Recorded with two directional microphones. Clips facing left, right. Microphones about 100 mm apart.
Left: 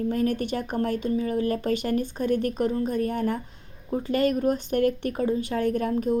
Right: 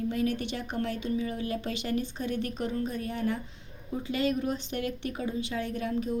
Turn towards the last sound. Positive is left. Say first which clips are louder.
# left 7 dB
turn(degrees=50)  # may be behind; listen again after turning